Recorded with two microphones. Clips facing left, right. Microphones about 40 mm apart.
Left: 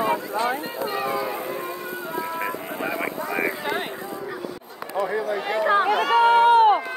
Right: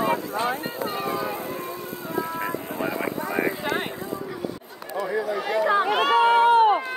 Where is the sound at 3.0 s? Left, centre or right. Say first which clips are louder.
Even; left.